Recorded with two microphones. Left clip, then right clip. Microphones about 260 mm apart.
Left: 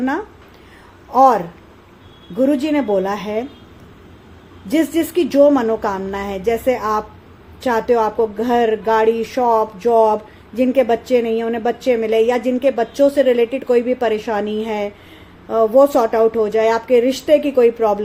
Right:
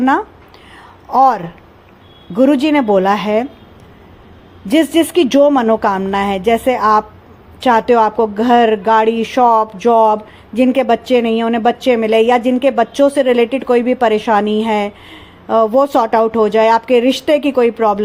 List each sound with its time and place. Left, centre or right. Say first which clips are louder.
1.1 s speech: right 1 dB; right
4.7 s speech: right 5 dB; right